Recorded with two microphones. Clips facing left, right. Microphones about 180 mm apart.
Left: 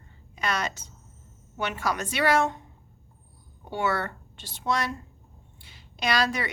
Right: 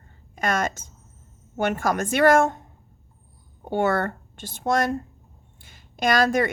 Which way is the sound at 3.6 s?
50° right (ahead or behind).